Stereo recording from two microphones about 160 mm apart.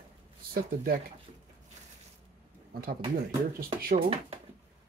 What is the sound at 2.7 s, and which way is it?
Speech, 70° right (ahead or behind).